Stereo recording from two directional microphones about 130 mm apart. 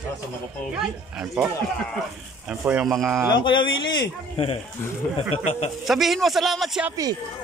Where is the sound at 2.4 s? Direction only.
10° right (ahead or behind).